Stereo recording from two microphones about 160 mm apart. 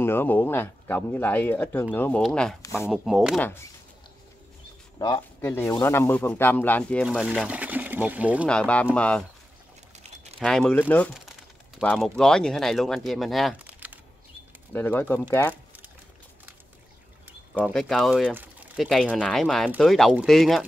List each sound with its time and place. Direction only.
0.0 s speech: 15° left (ahead or behind); by 3.3 s centre (ahead or behind)
4.9 s a man's voice: 25° left (ahead or behind)
5.5 s speech: 15° left (ahead or behind)
7.1 s speech: centre (ahead or behind)
8.5 s speech: 5° left (ahead or behind)
10.4 s speech: 5° left (ahead or behind)
14.7 s speech: 10° left (ahead or behind)
17.7 s speech: centre (ahead or behind)
18.3 s a sound: 10° right (ahead or behind)
18.9 s speech: centre (ahead or behind)